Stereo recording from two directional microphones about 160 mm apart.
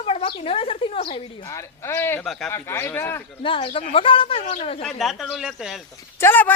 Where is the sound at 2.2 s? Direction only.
5° left (ahead or behind).